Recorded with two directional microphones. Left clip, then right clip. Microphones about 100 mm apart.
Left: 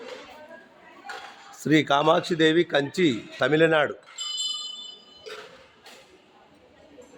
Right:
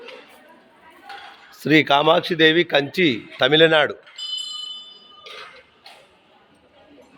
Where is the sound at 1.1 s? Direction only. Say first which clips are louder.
Even; 25° right (ahead or behind).